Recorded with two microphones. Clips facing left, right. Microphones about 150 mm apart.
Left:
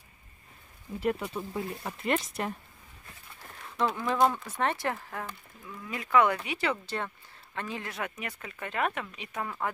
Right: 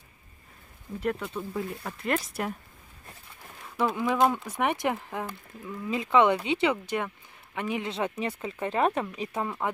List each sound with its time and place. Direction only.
1.2 s speech: 5° left (ahead or behind)
3.7 s speech: 10° right (ahead or behind); by 9.4 s 30° right (ahead or behind)
9.4 s speech: 20° right (ahead or behind)